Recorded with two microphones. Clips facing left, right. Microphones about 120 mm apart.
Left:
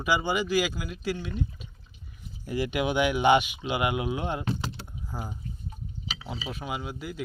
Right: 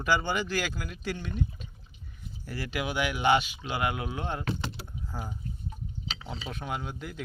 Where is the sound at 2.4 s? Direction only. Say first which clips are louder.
Left 6 dB; 15° left (ahead or behind).